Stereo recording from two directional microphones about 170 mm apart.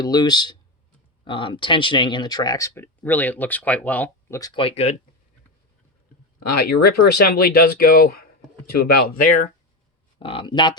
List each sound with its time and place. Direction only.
0.0 s speech: 25° left (ahead or behind)
4.4 s speech: 20° left (ahead or behind)
6.8 s speech: 65° left (ahead or behind)
10.2 s speech: 30° left (ahead or behind)